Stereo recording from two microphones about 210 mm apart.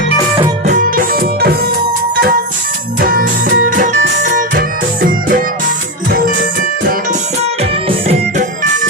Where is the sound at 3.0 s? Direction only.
45° right (ahead or behind).